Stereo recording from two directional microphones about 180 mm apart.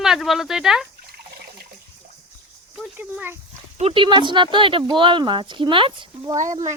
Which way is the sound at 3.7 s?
30° right (ahead or behind).